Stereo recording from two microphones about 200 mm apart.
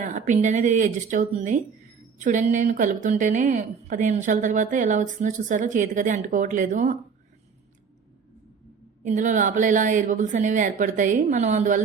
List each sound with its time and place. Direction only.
0.0 s a woman's voice: 40° right (ahead or behind)
9.0 s a woman's voice: 40° right (ahead or behind)